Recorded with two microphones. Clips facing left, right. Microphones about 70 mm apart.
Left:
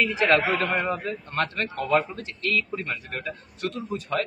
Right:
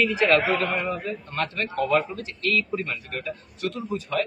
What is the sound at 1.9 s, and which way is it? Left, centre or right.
A man's voice, left.